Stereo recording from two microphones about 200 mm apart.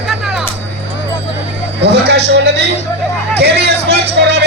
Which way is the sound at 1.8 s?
55° right (ahead or behind).